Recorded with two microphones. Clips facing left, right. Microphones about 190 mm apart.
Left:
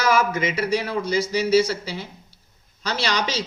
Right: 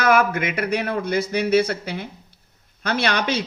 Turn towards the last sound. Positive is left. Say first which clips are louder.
# right 3 dB
turn(degrees=-55)  # may be behind; listen again after turning